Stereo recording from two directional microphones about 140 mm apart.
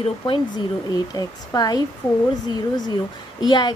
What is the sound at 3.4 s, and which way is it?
Speech, 30° left (ahead or behind).